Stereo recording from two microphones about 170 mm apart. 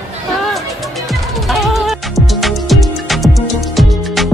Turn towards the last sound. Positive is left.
turn(degrees=0)  # may be behind; listen again after turning